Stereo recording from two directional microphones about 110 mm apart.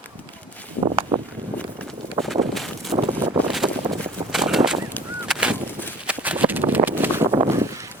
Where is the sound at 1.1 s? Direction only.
50° right (ahead or behind).